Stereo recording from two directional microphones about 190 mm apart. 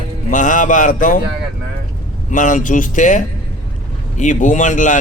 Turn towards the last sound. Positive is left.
turn(degrees=40)  # may be behind; listen again after turning